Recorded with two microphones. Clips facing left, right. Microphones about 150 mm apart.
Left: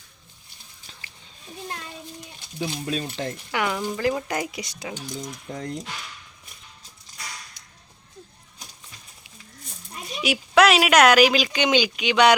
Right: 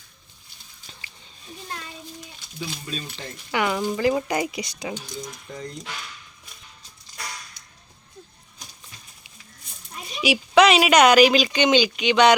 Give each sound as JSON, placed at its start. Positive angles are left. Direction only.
{"t": 2.6, "sound": "speech", "side_deg": 60}
{"t": 3.5, "sound": "speech", "side_deg": 0}
{"t": 10.2, "sound": "speech", "side_deg": 0}